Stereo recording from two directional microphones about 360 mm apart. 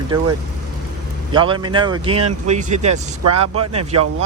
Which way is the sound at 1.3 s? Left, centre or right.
Centre.